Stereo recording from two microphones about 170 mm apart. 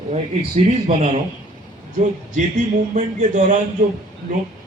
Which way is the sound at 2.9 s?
45° right (ahead or behind).